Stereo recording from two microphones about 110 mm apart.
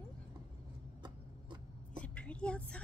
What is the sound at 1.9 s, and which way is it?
Vehicle, 10° left (ahead or behind).